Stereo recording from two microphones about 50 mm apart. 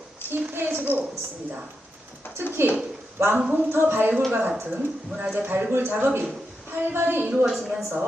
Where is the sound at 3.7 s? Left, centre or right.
Right.